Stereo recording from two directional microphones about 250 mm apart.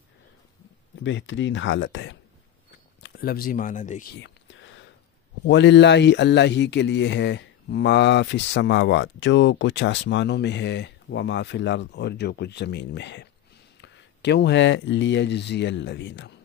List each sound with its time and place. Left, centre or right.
1.0 s a man's voice: left
3.0 s a sound: left
5.4 s a man's voice: left